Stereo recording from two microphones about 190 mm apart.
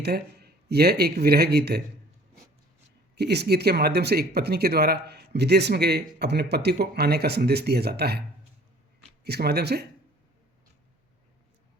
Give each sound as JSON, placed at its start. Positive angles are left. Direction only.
{"t": 0.0, "sound": "speech", "side_deg": -55}
{"t": 3.2, "sound": "speech", "side_deg": -60}
{"t": 9.2, "sound": "speech", "side_deg": -60}